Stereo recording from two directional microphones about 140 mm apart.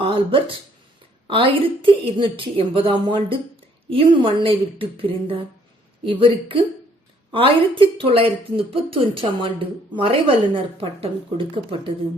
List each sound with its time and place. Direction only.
0.0 s a woman's voice: 40° right (ahead or behind)